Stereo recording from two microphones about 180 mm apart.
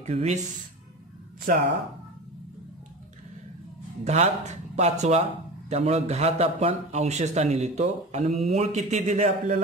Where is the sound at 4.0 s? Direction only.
40° right (ahead or behind).